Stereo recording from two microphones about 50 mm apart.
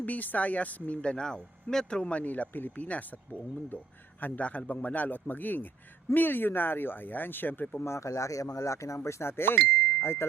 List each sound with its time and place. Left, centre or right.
0.0 s speech: left
4.2 s a man's voice: left
7.9 s speech: left
9.4 s speech: left